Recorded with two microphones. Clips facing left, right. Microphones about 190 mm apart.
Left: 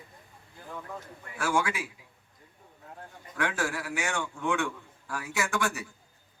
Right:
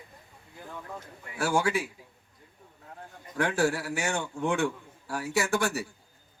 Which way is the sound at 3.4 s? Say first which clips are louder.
Right 5 dB; 30° right (ahead or behind).